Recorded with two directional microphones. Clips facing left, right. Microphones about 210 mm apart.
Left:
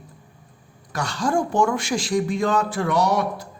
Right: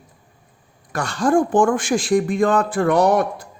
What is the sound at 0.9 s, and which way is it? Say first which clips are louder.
Speech: right 5 dB; 55° right (ahead or behind).